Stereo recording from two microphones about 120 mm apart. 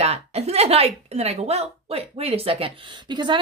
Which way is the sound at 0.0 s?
60° right (ahead or behind).